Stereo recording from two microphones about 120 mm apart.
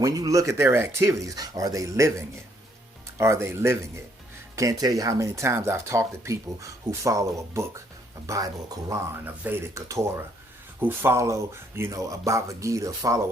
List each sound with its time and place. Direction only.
0.0 s speech: 25° right (ahead or behind)